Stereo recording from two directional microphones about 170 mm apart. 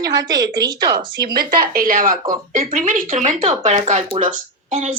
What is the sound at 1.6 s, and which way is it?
A woman's voice, 55° right (ahead or behind).